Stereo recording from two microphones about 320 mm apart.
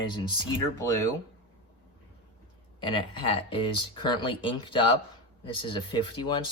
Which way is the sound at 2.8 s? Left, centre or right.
Centre.